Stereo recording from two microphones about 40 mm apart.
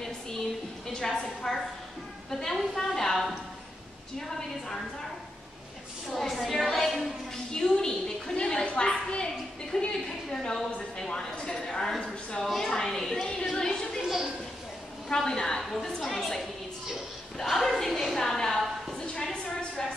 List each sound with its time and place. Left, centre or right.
0.0 s a sound: centre
1.2 s speech: centre
6.1 s a woman's voice: centre
7.5 s a woman's voice: centre
14.0 s speech: centre
15.0 s speech: centre
18.9 s a sound: centre